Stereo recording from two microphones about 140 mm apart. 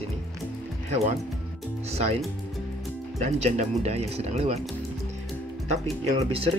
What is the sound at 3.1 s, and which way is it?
Speech, 55° right (ahead or behind).